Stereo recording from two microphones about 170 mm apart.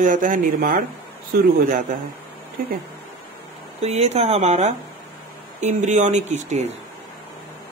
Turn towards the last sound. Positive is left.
turn(degrees=-45)  # may be behind; listen again after turning